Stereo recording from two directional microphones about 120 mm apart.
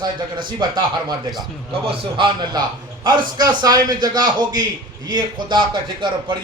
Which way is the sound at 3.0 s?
35° right (ahead or behind).